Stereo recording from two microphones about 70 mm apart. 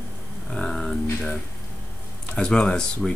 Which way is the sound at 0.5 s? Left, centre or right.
Centre.